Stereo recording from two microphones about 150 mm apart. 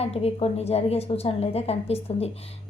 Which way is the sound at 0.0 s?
45° left (ahead or behind).